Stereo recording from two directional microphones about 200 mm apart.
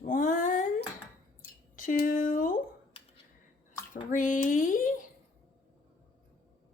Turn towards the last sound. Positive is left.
turn(degrees=40)  # may be behind; listen again after turning